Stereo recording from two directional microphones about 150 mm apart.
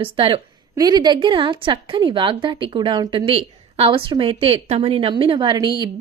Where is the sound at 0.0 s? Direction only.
35° right (ahead or behind).